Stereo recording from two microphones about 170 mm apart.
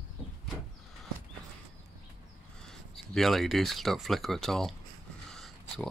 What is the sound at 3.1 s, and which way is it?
Speech, centre (ahead or behind).